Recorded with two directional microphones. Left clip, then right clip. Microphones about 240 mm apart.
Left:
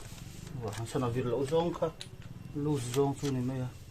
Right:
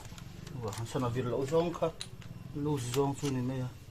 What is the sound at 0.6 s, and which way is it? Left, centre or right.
Speech, left.